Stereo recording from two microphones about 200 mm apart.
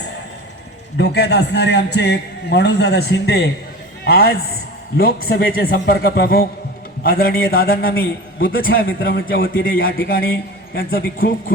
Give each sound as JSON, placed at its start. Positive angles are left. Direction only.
{"t": 0.9, "sound": "a man's voice", "side_deg": 55}